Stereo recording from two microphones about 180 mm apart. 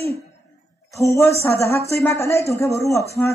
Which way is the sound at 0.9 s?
15° left (ahead or behind).